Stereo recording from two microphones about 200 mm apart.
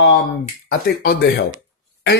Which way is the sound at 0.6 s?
50° left (ahead or behind).